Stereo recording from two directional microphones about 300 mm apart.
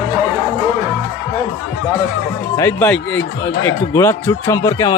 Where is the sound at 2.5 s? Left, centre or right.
Centre.